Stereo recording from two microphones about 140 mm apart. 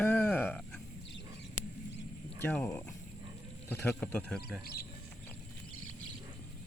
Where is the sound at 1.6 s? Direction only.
70° left (ahead or behind).